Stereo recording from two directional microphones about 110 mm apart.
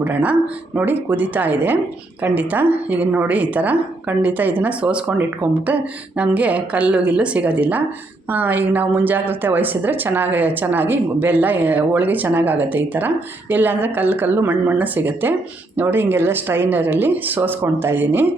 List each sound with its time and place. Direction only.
0.0 s a woman's voice: 15° right (ahead or behind)